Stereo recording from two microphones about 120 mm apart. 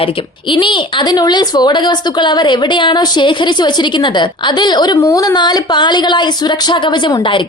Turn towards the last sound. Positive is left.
turn(degrees=35)  # may be behind; listen again after turning